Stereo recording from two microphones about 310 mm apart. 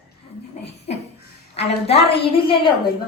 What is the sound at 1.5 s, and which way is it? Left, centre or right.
Speech, centre.